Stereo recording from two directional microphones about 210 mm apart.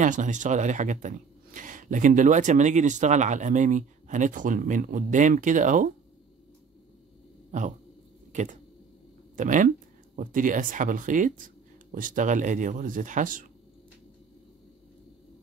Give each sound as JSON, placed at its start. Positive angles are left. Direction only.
{"t": 0.0, "sound": "speech", "side_deg": -35}
{"t": 8.3, "sound": "speech", "side_deg": -35}